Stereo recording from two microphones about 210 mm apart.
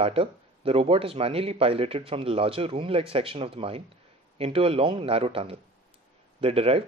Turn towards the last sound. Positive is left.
turn(degrees=-25)  # may be behind; listen again after turning